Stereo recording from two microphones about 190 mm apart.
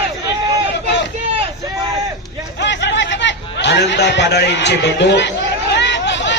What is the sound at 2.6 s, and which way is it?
Chatter, 70° left (ahead or behind).